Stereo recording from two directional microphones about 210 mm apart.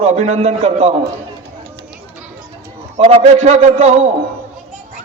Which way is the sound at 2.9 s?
30° right (ahead or behind).